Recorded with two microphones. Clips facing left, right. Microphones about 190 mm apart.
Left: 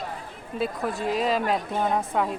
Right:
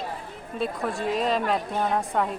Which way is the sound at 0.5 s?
Centre (ahead or behind).